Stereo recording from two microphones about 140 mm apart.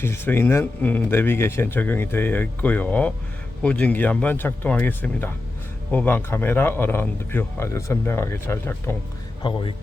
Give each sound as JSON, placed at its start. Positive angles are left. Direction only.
{"t": 0.0, "sound": "speech", "side_deg": 15}
{"t": 9.4, "sound": "speech", "side_deg": 35}